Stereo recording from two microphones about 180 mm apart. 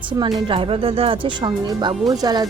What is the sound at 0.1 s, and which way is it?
Speech, 25° right (ahead or behind).